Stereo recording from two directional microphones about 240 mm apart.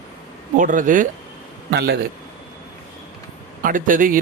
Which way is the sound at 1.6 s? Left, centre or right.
Right.